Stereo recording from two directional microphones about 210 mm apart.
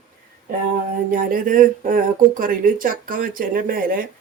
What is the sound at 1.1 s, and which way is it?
Speech, 40° right (ahead or behind).